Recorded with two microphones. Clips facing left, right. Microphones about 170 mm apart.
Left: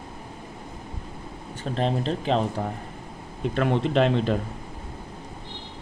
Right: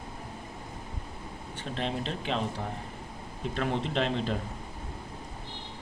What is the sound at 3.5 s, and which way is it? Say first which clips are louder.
Speech: left 7 dB; 60° left (ahead or behind).